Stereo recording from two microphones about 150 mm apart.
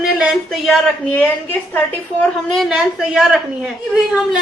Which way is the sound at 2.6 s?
5° right (ahead or behind).